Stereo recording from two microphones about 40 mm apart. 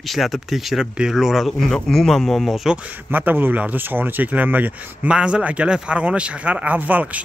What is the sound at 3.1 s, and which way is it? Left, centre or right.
Speech, right.